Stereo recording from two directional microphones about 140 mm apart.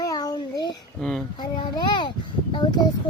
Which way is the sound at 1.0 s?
5° left (ahead or behind).